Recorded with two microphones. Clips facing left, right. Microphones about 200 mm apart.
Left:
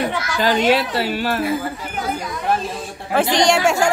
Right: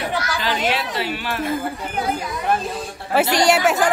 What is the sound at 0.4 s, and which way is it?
A woman's voice, 40° left (ahead or behind).